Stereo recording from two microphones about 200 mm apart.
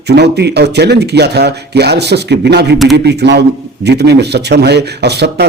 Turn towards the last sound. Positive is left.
turn(degrees=-55)  # may be behind; listen again after turning